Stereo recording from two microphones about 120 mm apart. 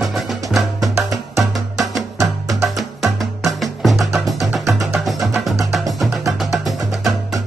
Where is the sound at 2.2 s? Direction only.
25° right (ahead or behind).